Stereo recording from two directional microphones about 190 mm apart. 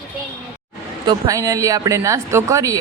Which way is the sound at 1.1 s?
15° right (ahead or behind).